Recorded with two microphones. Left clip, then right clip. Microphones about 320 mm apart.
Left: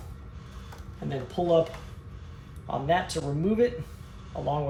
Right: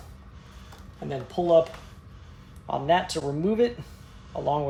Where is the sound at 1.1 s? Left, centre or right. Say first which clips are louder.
Right 3 dB; right.